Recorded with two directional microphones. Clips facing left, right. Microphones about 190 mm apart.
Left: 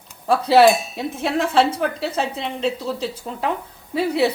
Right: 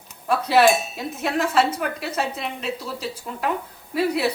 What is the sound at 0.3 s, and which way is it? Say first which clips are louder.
A woman's voice: left 4 dB; 30° left (ahead or behind).